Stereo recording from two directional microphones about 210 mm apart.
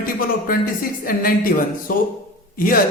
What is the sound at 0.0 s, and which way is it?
Speech, 45° left (ahead or behind).